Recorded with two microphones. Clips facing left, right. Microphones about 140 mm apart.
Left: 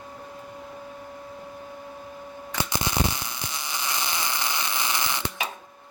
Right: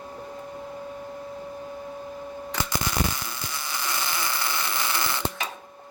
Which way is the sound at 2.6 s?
20° left (ahead or behind).